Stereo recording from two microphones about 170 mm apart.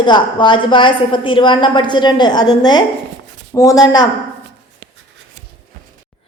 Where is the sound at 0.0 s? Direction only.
25° left (ahead or behind).